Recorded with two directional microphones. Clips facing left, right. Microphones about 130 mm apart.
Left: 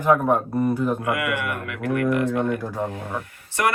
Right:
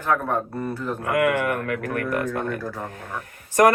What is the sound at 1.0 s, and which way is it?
Speech, 45° right (ahead or behind).